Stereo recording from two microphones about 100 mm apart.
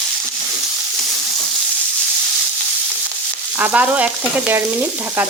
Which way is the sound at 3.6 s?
15° right (ahead or behind).